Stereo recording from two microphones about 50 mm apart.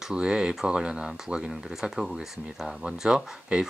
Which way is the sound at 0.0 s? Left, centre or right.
Centre.